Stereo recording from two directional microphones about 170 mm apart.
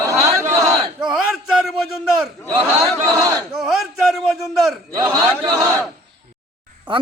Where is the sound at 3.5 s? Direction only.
Centre (ahead or behind).